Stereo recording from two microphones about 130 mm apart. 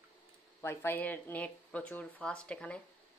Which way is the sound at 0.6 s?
20° left (ahead or behind).